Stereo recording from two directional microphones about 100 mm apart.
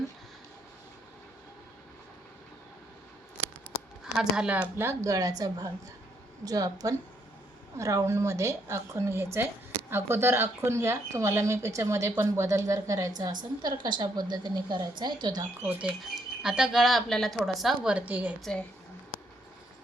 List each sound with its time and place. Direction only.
4.0 s speech: 5° right (ahead or behind)
4.8 s a woman's voice: 30° right (ahead or behind); by 15.4 s 45° right (ahead or behind)
15.6 s a woman's voice: 15° right (ahead or behind)
17.8 s a woman's voice: 15° right (ahead or behind)